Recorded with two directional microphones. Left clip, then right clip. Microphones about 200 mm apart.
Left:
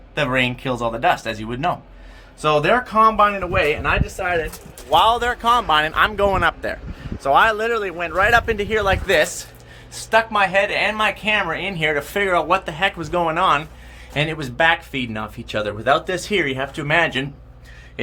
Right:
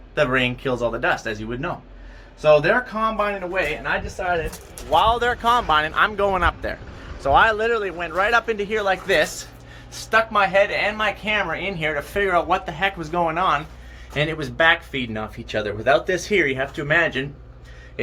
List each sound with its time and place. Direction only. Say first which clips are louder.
0.1 s speech: even; 15° left (ahead or behind); by 3.6 s 35° left (ahead or behind)
4.9 s speech: left 2 dB; 20° left (ahead or behind)